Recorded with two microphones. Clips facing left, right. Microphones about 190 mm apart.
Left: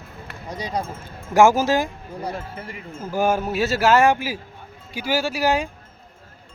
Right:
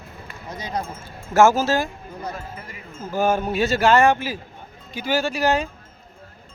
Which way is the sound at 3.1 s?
10° left (ahead or behind).